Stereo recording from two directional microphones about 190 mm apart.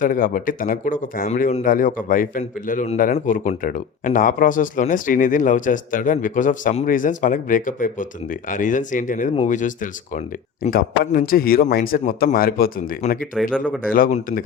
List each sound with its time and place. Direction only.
0.0 s speech: 45° left (ahead or behind)
13.3 s speech: 5° right (ahead or behind)
13.9 s speech: 45° left (ahead or behind)